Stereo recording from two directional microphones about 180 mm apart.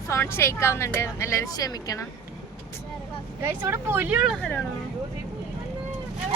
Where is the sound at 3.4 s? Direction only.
15° right (ahead or behind).